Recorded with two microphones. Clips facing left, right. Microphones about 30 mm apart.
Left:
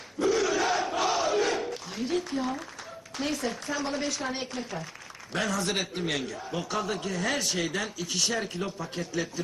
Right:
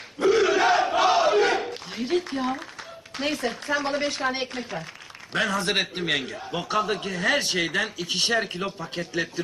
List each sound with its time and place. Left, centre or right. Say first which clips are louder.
0.2 s battle cry: right 6 dB; right
3.2 s a man's voice: right 4 dB; right